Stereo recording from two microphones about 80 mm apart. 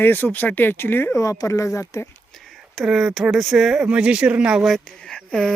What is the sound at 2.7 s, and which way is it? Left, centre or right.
Speech, centre.